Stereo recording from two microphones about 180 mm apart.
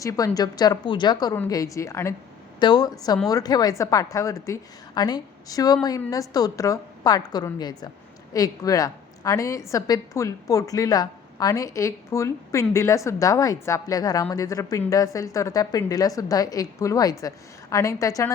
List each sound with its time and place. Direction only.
0.0 s a woman's voice: 20° left (ahead or behind)